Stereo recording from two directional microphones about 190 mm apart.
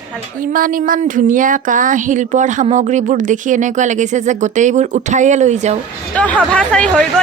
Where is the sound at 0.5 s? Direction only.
45° right (ahead or behind).